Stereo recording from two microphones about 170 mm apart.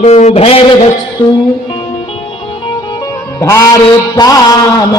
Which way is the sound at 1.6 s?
30° left (ahead or behind).